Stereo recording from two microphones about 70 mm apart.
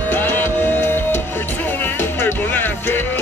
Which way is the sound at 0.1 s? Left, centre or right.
Left.